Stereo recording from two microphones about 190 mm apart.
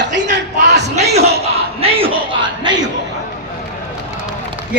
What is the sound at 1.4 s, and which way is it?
Speech, 30° right (ahead or behind).